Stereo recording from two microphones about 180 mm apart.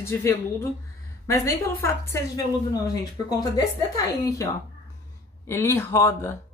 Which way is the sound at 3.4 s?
20° left (ahead or behind).